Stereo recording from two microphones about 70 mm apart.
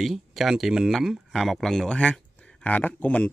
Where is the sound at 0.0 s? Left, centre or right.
Centre.